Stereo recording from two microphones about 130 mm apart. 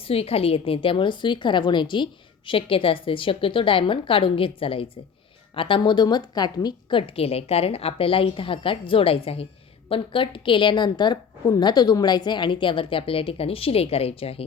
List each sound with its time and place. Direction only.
0.0 s a woman's voice: 50° left (ahead or behind)